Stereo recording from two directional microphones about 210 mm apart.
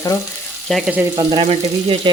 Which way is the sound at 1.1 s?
25° right (ahead or behind).